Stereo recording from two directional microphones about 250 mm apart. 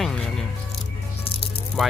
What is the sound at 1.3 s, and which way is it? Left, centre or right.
Music, left.